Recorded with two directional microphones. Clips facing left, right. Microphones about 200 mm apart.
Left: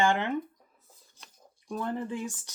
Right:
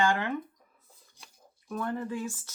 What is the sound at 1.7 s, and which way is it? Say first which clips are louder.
Speech: even; 20° left (ahead or behind).